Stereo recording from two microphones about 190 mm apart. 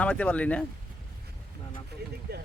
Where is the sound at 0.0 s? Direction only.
5° left (ahead or behind).